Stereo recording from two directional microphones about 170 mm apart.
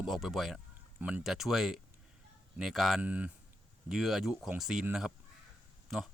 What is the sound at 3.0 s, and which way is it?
Speech, 10° right (ahead or behind).